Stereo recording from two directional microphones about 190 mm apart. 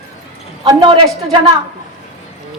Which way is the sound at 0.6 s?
25° right (ahead or behind).